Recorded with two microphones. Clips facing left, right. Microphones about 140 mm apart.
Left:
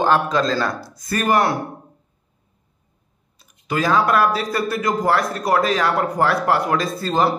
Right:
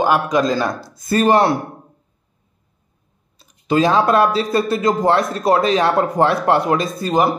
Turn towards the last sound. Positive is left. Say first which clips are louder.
# right 2 dB
turn(degrees=-15)  # may be behind; listen again after turning